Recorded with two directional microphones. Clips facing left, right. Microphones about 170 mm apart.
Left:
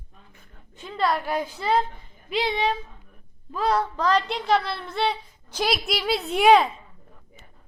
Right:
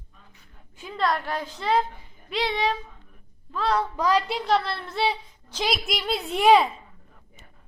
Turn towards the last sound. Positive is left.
turn(degrees=0)  # may be behind; listen again after turning